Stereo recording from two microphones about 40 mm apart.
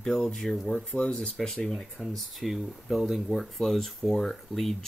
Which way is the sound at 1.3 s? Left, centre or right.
Centre.